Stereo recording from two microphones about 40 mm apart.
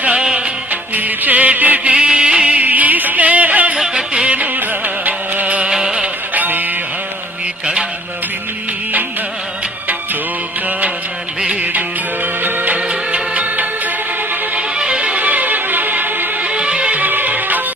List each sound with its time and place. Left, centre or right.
0.0 s music: right
0.7 s music: right
2.0 s a sound: right
2.6 s yodeling: right
4.1 s music: right
4.4 s music: right
5.5 s music: right
6.3 s music: right
12.2 s music: right
12.7 s music: right
14.8 s music: right
15.2 s music: right
16.5 s music: right
17.0 s music: right